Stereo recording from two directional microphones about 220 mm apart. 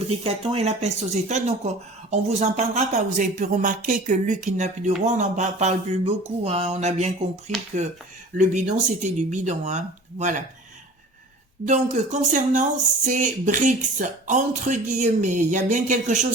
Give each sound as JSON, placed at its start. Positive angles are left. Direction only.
{"t": 0.3, "sound": "speech", "side_deg": -25}
{"t": 11.6, "sound": "speech", "side_deg": -35}